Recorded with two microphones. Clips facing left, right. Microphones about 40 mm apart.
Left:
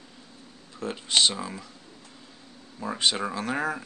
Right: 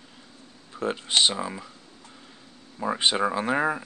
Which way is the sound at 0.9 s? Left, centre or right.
Centre.